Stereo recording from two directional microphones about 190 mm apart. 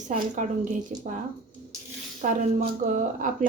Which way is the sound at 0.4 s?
40° right (ahead or behind).